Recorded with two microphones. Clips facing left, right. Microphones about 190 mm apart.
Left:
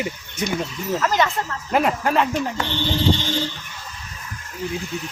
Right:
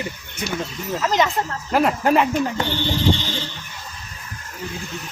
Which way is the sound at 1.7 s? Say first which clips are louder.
Right 1 dB; centre (ahead or behind).